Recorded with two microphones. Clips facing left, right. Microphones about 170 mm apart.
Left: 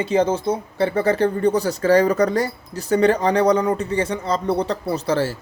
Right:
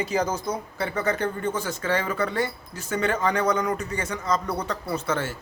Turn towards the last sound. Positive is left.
turn(degrees=30)  # may be behind; listen again after turning